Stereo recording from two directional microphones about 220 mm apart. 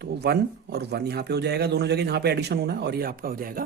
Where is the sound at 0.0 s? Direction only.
50° right (ahead or behind).